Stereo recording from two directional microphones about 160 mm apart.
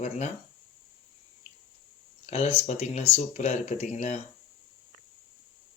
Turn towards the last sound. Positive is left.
turn(degrees=45)  # may be behind; listen again after turning